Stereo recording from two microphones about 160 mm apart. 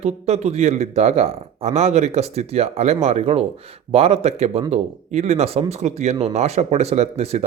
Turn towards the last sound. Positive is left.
turn(degrees=-40)  # may be behind; listen again after turning